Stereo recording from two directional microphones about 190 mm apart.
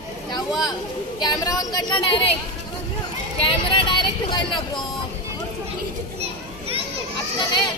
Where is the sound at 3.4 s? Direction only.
25° left (ahead or behind).